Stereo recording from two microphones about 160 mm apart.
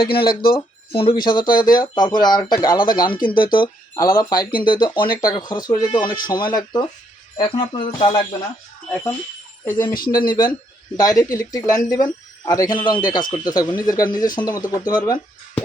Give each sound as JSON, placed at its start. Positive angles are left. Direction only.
{"t": 0.1, "sound": "speech", "side_deg": 75}
{"t": 0.5, "sound": "speech", "side_deg": 35}
{"t": 9.6, "sound": "speech", "side_deg": 15}
{"t": 9.9, "sound": "speech", "side_deg": 65}
{"t": 10.2, "sound": "speech", "side_deg": 25}